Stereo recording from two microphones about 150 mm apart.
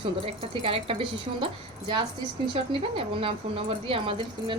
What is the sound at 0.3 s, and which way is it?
Speech, 40° right (ahead or behind).